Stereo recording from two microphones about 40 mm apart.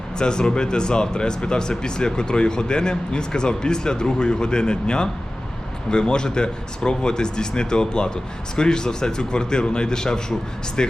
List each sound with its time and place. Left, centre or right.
0.2 s speech: left